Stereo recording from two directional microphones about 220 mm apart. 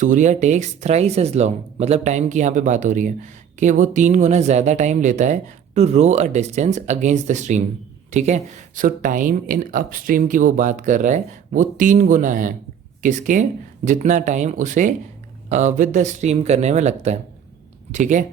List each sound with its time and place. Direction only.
0.0 s speech: 35° right (ahead or behind)